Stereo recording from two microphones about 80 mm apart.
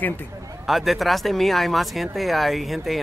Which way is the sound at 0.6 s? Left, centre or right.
Centre.